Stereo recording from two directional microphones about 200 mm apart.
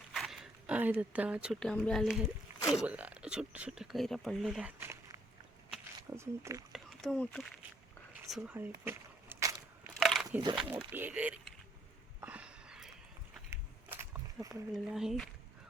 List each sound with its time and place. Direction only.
0.1 s speech: centre (ahead or behind)
6.7 s speech: centre (ahead or behind)
8.8 s keys jangling: 10° right (ahead or behind)
10.0 s a sound: centre (ahead or behind)
10.7 s speech: 10° right (ahead or behind)
12.2 s a sound: 5° right (ahead or behind)
13.9 s speech: 10° right (ahead or behind)